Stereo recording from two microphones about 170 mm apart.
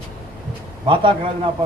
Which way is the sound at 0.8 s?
30° right (ahead or behind).